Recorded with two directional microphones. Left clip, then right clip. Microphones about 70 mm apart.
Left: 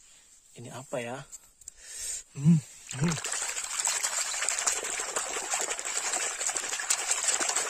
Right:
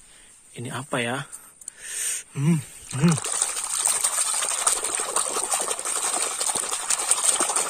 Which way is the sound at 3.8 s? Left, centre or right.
Left.